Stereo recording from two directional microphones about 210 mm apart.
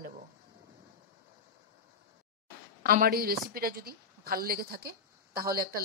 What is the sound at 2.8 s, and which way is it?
A woman's voice, 45° right (ahead or behind).